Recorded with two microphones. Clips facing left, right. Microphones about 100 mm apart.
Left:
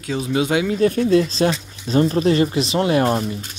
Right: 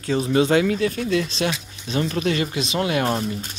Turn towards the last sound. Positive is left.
turn(degrees=25)  # may be behind; listen again after turning